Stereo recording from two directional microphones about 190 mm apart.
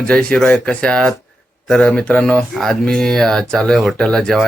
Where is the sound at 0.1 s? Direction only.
5° left (ahead or behind).